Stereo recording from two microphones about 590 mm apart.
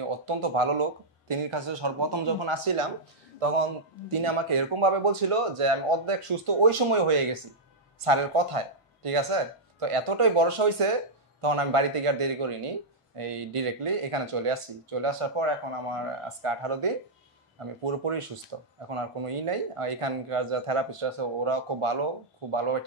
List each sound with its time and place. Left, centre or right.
0.0 s speech: right
3.3 s a man's voice: right
4.1 s speech: right